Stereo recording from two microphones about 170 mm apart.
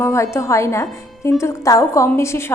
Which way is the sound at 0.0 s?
15° left (ahead or behind).